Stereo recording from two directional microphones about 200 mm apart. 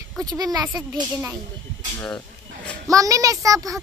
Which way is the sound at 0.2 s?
20° right (ahead or behind).